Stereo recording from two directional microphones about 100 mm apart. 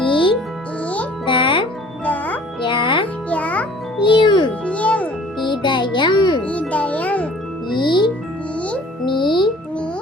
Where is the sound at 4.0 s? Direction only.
50° left (ahead or behind).